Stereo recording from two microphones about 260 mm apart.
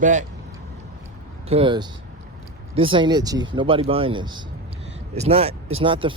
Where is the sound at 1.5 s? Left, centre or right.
Centre.